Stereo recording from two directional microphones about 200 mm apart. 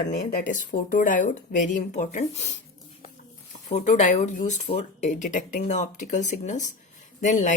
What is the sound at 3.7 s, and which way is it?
Speech, 35° left (ahead or behind).